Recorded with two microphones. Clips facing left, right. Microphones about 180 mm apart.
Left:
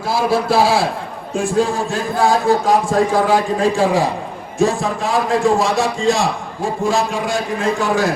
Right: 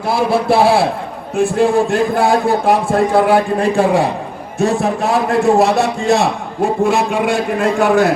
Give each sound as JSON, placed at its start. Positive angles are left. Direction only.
{"t": 0.1, "sound": "a man's voice", "side_deg": -60}